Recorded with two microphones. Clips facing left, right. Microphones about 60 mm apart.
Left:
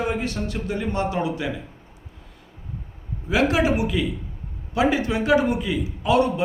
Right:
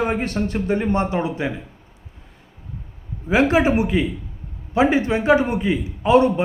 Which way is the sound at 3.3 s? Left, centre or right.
Right.